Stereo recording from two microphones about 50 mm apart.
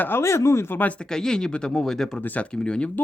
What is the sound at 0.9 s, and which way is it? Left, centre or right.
Speech, centre.